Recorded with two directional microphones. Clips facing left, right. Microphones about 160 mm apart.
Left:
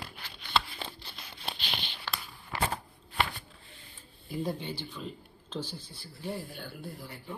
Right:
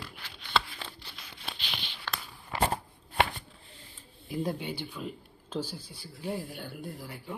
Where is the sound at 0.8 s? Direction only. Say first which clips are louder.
Left 3 dB; 30° left (ahead or behind).